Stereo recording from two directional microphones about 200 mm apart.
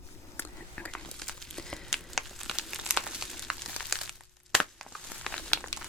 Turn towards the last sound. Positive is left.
turn(degrees=0)  # may be behind; listen again after turning